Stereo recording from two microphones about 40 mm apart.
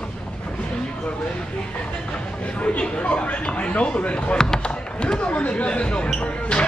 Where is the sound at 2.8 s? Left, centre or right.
Left.